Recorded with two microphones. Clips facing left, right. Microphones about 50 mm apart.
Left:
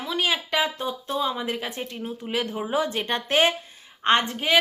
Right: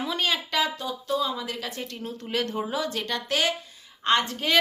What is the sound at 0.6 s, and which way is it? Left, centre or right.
A woman's voice, left.